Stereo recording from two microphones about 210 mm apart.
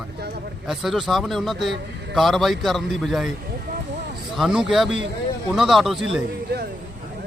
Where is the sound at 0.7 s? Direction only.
Centre (ahead or behind).